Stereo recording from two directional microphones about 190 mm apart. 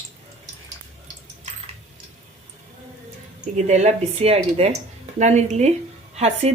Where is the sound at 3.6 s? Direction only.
35° right (ahead or behind).